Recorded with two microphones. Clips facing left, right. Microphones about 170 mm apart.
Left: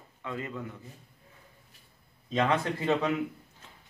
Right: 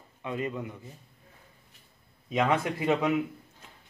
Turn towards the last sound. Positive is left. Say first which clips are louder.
# right 1 dB
turn(degrees=-10)  # may be behind; listen again after turning